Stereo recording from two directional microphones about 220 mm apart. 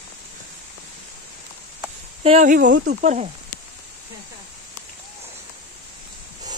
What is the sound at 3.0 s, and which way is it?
Speech, 35° right (ahead or behind).